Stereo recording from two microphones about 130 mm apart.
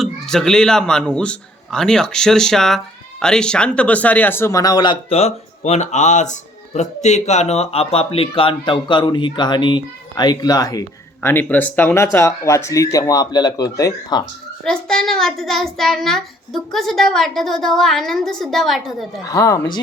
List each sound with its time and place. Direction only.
0.0 s a man's voice: 5° left (ahead or behind); by 4.9 s 30° left (ahead or behind)
5.0 s speech: 50° left (ahead or behind); by 10.8 s 30° left (ahead or behind)
11.2 s speech: 15° left (ahead or behind)
14.6 s a man's voice: 5° left (ahead or behind)
19.2 s speech: 25° left (ahead or behind)